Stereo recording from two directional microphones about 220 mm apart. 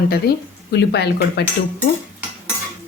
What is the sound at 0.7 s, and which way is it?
Speech, 50° left (ahead or behind).